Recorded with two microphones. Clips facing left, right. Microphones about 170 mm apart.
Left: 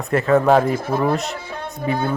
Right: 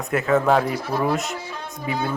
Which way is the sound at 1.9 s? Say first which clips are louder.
Left 4 dB; 55° left (ahead or behind).